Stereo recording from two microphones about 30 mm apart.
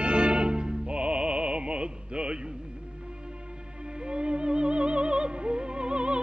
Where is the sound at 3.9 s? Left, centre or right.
Right.